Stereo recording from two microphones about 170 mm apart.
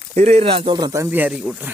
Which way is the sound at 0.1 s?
40° right (ahead or behind).